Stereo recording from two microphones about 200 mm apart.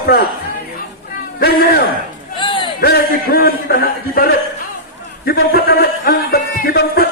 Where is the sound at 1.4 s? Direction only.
50° left (ahead or behind).